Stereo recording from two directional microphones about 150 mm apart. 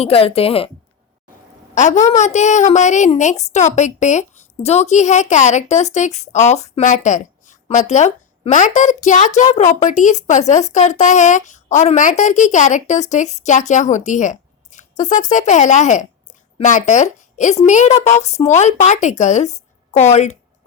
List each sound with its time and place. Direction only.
0.0 s a woman's voice: 40° left (ahead or behind)
1.7 s a woman's voice: 55° left (ahead or behind)